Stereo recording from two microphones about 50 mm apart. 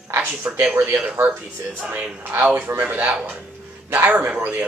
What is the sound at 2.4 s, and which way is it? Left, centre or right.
Speech, right.